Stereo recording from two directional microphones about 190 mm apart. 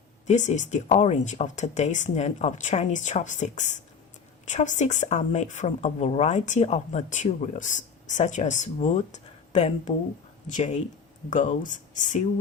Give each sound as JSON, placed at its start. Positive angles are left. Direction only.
{"t": 0.3, "sound": "speech", "side_deg": 40}